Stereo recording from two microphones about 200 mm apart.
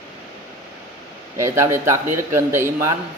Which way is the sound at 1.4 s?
15° right (ahead or behind).